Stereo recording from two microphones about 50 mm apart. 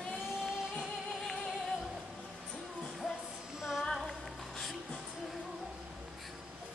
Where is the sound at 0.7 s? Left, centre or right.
Centre.